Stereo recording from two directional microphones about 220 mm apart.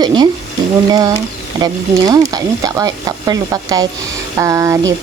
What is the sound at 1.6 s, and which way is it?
Speech, 15° right (ahead or behind).